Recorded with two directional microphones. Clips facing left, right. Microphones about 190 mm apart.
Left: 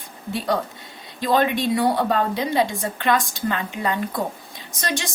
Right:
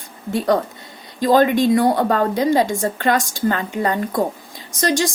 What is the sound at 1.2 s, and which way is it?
A woman's voice, 45° right (ahead or behind).